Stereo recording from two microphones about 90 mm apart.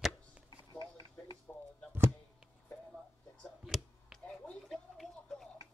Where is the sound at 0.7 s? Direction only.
50° left (ahead or behind).